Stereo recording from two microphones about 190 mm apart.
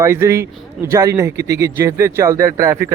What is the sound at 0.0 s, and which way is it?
Speech, 15° right (ahead or behind).